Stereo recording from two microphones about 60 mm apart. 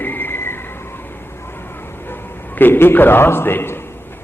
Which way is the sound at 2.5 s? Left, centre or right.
Left.